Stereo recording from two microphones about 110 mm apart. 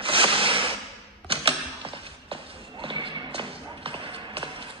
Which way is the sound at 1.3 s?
55° right (ahead or behind).